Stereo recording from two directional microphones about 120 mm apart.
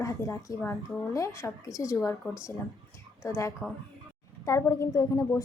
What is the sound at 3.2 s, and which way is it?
A woman's voice, 25° left (ahead or behind).